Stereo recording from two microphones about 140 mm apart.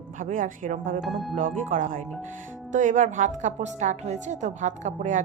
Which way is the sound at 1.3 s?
70° right (ahead or behind).